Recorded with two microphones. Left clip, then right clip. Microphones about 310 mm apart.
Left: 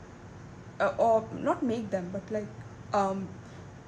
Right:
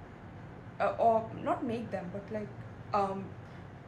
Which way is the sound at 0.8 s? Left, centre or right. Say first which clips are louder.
Left 3 dB; left.